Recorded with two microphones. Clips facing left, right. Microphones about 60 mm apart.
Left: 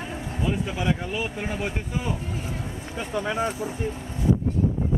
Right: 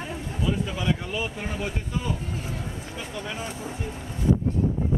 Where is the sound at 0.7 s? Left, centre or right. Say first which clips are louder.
Left 1 dB; left.